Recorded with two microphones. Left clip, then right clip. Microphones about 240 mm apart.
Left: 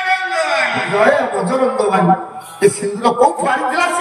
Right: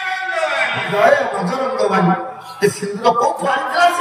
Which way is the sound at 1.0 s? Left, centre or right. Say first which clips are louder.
Right 1 dB; left.